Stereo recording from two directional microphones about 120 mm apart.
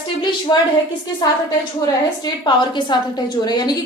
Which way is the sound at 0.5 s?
35° left (ahead or behind).